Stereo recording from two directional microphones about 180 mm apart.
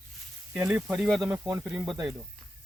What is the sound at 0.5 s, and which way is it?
Speech, 10° right (ahead or behind).